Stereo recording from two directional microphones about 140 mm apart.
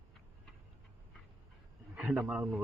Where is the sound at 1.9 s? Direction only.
10° right (ahead or behind).